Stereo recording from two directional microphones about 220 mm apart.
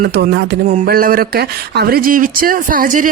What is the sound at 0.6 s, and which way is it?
Speech, 35° right (ahead or behind).